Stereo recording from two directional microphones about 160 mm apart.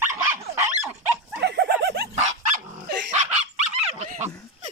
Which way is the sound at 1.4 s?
90° right.